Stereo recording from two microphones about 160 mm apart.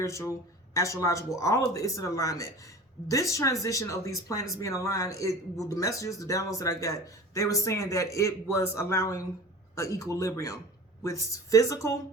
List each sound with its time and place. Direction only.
0.0 s speech: 15° left (ahead or behind)